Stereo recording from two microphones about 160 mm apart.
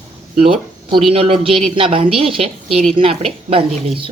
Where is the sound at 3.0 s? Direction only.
40° right (ahead or behind).